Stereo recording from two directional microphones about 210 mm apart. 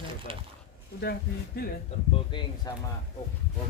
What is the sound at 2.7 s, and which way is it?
Speech, 20° left (ahead or behind).